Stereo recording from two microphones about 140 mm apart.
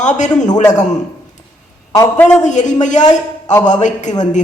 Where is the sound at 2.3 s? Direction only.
60° left (ahead or behind).